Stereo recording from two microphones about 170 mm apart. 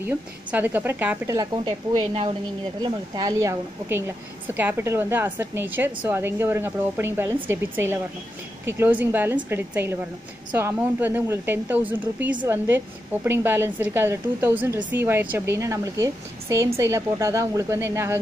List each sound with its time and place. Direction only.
0.0 s a woman's voice: 10° right (ahead or behind)